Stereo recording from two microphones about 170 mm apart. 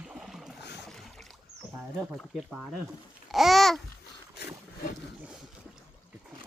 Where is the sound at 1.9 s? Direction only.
5° right (ahead or behind).